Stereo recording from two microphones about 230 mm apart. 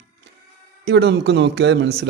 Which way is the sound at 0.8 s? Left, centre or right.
Right.